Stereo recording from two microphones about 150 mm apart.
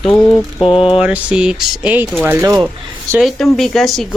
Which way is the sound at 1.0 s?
5° right (ahead or behind).